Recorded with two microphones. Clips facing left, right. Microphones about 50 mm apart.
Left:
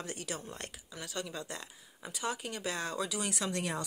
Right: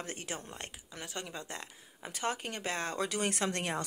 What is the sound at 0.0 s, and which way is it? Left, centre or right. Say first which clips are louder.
Speech: even; right.